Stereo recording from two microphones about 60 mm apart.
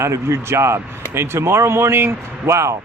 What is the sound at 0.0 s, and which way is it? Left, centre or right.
Speech, right.